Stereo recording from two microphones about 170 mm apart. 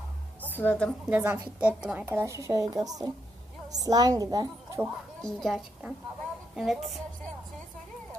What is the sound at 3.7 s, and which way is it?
A woman's voice, 20° right (ahead or behind).